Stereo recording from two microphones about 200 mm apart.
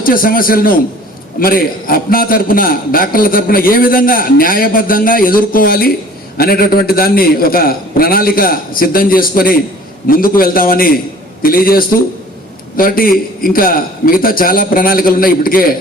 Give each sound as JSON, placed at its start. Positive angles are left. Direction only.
{"t": 0.0, "sound": "a man's voice", "side_deg": 45}